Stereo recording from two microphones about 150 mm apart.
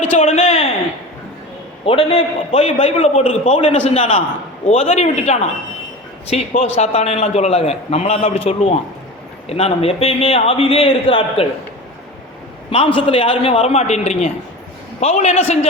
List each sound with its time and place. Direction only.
0.0 s a sound: 50° left (ahead or behind)
1.8 s a man's voice: 40° left (ahead or behind)
6.5 s a man's voice: 50° left (ahead or behind)
12.7 s a man's voice: 35° left (ahead or behind)